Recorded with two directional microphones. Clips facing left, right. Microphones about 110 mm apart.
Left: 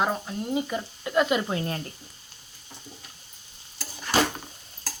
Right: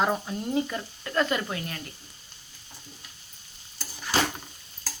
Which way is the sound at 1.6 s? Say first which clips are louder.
Left 6 dB; 30° left (ahead or behind).